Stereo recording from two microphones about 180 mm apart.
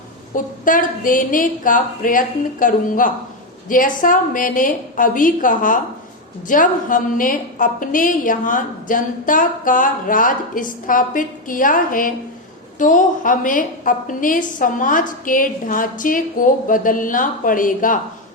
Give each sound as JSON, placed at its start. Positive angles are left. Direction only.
{"t": 0.3, "sound": "a woman's voice", "side_deg": 50}